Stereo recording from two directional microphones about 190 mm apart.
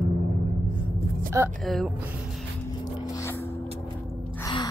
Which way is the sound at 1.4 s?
15° right (ahead or behind).